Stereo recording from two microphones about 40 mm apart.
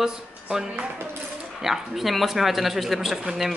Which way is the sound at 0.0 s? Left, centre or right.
Centre.